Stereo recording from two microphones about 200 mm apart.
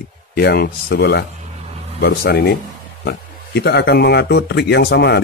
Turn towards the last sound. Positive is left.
turn(degrees=55)  # may be behind; listen again after turning